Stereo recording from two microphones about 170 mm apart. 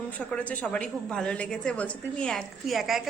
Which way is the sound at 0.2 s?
10° left (ahead or behind).